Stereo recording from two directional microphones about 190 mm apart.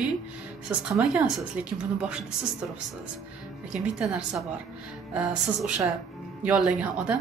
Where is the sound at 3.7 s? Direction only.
5° right (ahead or behind).